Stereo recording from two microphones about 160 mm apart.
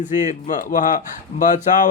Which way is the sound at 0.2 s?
55° left (ahead or behind).